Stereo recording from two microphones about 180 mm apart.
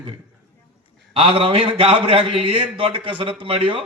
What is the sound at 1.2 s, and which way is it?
A man's voice, 30° right (ahead or behind).